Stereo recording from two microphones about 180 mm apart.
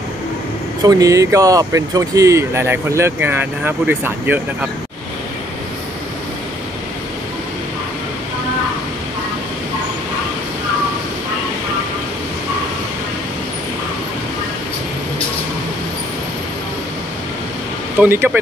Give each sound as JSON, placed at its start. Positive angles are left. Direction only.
{"t": 0.8, "sound": "speech", "side_deg": -20}
{"t": 18.0, "sound": "speech", "side_deg": -10}